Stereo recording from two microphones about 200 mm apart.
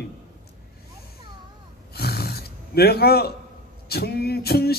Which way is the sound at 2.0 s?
50° left (ahead or behind).